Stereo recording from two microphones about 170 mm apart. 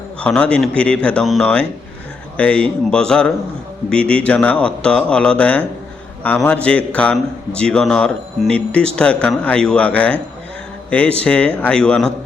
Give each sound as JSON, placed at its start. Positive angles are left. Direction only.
{"t": 0.2, "sound": "a man's voice", "side_deg": 5}
{"t": 11.2, "sound": "a man's voice", "side_deg": 5}